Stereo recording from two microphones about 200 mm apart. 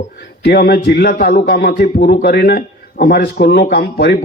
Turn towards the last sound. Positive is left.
turn(degrees=50)  # may be behind; listen again after turning